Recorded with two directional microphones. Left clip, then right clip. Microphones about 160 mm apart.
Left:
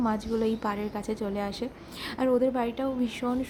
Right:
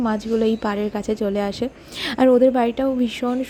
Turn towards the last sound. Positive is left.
turn(degrees=-30)  # may be behind; listen again after turning